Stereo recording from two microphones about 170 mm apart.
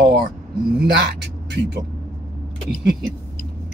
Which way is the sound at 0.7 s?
90° right.